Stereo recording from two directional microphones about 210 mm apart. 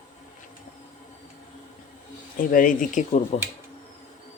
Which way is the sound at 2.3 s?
40° left (ahead or behind).